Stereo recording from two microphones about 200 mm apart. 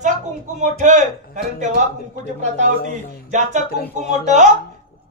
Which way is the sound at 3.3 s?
35° right (ahead or behind).